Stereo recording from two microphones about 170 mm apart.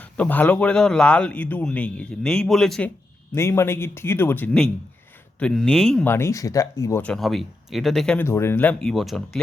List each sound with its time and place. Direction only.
0.0 s speech: 10° left (ahead or behind)
3.3 s speech: 15° left (ahead or behind)
6.1 s speech: 15° left (ahead or behind)
7.1 s speech: centre (ahead or behind)